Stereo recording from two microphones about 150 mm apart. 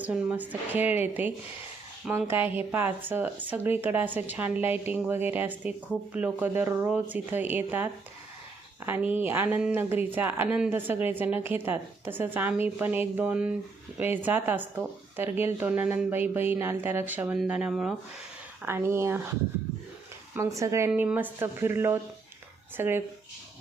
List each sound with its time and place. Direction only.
0.0 s speech: 10° right (ahead or behind)
8.9 s speech: 10° right (ahead or behind)
18.6 s speech: 15° right (ahead or behind)
20.3 s speech: 20° right (ahead or behind)